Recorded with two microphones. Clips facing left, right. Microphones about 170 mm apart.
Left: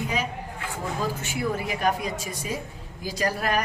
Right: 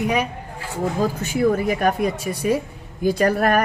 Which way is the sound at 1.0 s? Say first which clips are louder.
Right 9 dB; 45° right (ahead or behind).